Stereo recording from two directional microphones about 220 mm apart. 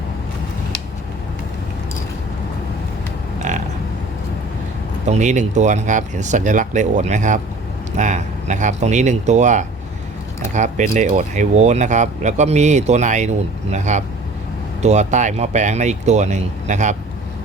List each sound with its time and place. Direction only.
5.0 s speech: 30° right (ahead or behind)